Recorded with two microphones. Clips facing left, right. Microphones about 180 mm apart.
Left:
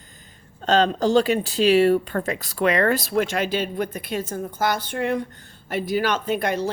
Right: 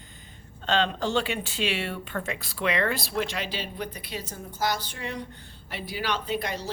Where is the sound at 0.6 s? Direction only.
40° left (ahead or behind).